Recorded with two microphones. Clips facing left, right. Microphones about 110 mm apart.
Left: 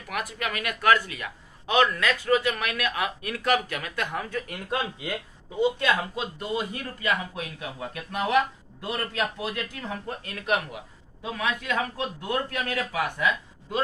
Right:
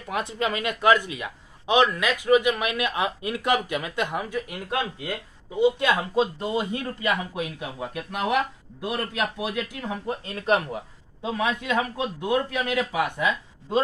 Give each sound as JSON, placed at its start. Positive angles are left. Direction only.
{"t": 0.1, "sound": "speech", "side_deg": -25}
{"t": 5.6, "sound": "speech", "side_deg": -15}
{"t": 11.2, "sound": "speech", "side_deg": -25}